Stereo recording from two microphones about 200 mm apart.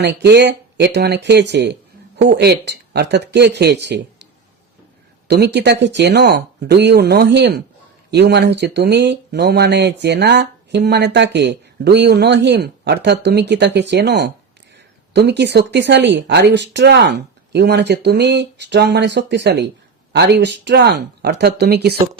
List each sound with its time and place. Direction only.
0.0 s speech: 55° right (ahead or behind)
5.3 s speech: 55° right (ahead or behind)